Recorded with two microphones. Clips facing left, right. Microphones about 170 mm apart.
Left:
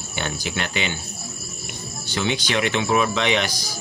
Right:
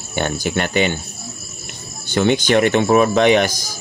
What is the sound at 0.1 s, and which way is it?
Speech, 50° right (ahead or behind).